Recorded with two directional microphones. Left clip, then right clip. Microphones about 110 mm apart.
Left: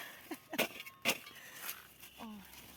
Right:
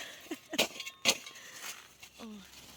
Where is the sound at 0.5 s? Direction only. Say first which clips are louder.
Right 5 dB; 35° right (ahead or behind).